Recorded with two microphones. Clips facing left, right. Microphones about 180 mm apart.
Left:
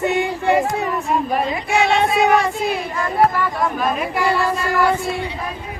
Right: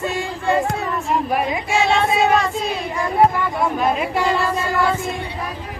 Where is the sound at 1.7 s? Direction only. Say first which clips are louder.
Left 1 dB; 15° left (ahead or behind).